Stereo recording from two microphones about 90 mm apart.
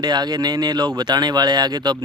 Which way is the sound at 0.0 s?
50° right (ahead or behind).